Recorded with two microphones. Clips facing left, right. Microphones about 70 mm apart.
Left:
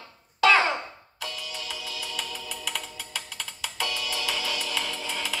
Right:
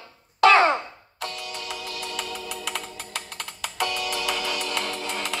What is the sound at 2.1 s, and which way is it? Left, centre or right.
Music, centre.